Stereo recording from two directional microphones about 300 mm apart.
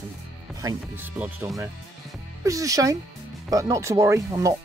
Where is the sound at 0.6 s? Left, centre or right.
Centre.